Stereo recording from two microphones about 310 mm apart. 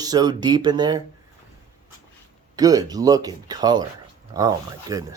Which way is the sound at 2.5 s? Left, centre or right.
Centre.